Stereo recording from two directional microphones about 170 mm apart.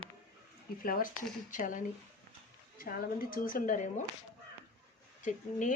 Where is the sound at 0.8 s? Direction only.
60° left (ahead or behind).